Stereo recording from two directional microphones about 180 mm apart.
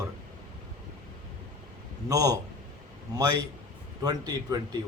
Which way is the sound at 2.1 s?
20° right (ahead or behind).